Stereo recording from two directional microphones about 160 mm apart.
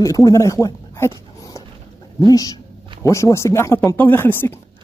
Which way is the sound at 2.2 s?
20° left (ahead or behind).